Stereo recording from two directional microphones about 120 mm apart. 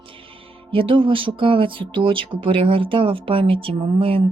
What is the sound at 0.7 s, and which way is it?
Speech, 45° right (ahead or behind).